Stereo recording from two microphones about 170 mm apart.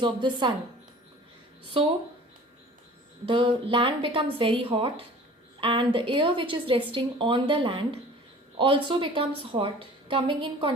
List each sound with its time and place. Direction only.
0.0 s speech: 30° right (ahead or behind)
3.2 s a woman's voice: 30° right (ahead or behind)